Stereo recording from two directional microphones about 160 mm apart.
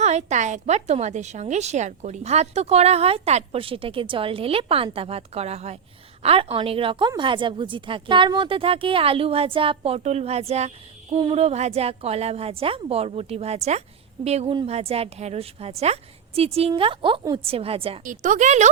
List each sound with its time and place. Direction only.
0.0 s a woman's voice: 45° right (ahead or behind)
18.0 s speech: 55° right (ahead or behind)